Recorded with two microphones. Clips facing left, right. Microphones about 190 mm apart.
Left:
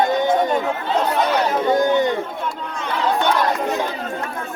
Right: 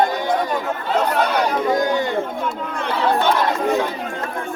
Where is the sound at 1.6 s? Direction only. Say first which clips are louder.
Left 2 dB; 20° left (ahead or behind).